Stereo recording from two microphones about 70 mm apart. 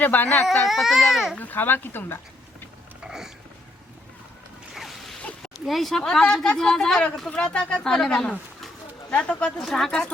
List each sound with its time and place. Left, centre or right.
0.0 s speech: left
0.6 s a child's voice: centre
1.4 s speech: left
3.0 s a sound: centre
4.7 s zipper: centre
5.6 s a child's voice: centre
9.6 s speech: centre